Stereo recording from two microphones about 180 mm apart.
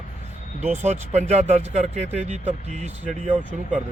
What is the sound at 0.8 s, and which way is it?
Speech, 40° right (ahead or behind).